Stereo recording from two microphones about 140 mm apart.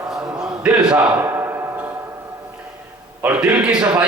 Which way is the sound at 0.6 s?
5° right (ahead or behind).